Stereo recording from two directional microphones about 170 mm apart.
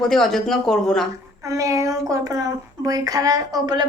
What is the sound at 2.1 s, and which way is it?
A woman's voice, 20° right (ahead or behind).